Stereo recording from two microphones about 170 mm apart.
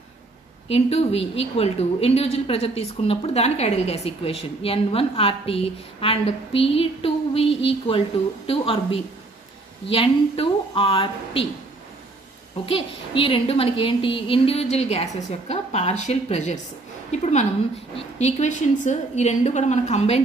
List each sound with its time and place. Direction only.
0.7 s a woman's voice: 35° left (ahead or behind)
12.6 s a woman's voice: 30° left (ahead or behind)